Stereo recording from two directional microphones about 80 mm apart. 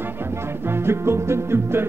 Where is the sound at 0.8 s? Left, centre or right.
Right.